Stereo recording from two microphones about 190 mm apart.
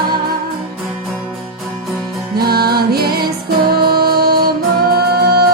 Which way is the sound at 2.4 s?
55° right (ahead or behind).